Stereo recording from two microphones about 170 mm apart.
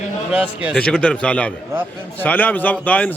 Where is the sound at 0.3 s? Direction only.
5° right (ahead or behind).